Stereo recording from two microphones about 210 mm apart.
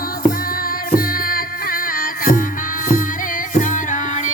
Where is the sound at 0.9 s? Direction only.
45° left (ahead or behind).